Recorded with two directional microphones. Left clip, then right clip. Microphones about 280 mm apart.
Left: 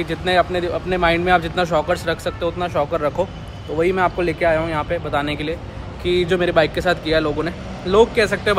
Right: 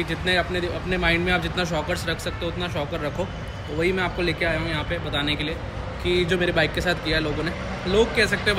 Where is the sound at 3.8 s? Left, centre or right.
Centre.